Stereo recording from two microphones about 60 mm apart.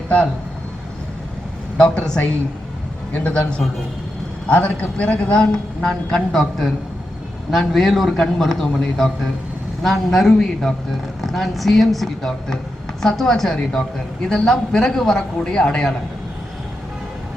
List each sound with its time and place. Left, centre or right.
1.8 s a man's voice: centre
4.4 s a man's voice: left